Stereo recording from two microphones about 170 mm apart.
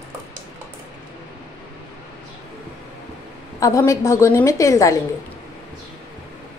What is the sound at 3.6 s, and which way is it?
A woman's voice, 20° left (ahead or behind).